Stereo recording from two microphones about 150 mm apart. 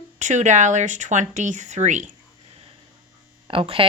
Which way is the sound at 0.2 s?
55° right (ahead or behind).